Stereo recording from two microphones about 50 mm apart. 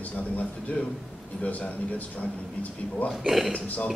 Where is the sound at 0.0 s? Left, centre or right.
Left.